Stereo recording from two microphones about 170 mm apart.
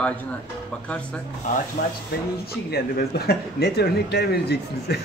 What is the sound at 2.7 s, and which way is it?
Speech, 65° left (ahead or behind).